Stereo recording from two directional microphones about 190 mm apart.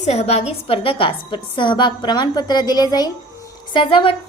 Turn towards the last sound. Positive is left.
turn(degrees=25)  # may be behind; listen again after turning